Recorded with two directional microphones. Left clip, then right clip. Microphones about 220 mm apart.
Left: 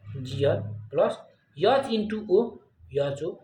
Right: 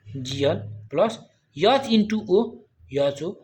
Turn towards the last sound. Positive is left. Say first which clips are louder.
# right 4 dB
turn(degrees=-35)  # may be behind; listen again after turning